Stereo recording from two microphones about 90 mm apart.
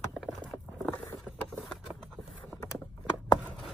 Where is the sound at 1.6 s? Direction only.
5° left (ahead or behind).